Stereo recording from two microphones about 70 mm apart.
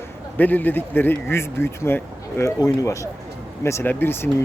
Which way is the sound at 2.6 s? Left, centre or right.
Left.